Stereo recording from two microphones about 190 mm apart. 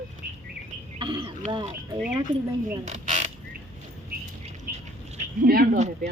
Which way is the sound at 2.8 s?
40° right (ahead or behind).